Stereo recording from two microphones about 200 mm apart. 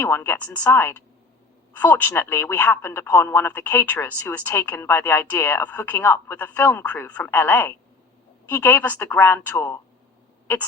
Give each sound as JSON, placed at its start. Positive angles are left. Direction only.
{"t": 0.0, "sound": "speech", "side_deg": 10}